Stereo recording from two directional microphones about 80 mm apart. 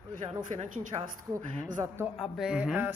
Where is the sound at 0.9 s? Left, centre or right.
Right.